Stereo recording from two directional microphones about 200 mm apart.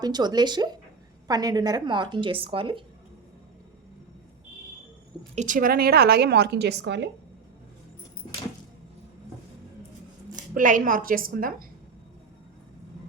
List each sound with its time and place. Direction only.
0.0 s a woman's voice: 20° right (ahead or behind)
5.3 s a woman's voice: 35° right (ahead or behind); by 7.1 s 60° right (ahead or behind)
10.5 s a woman's voice: 40° right (ahead or behind)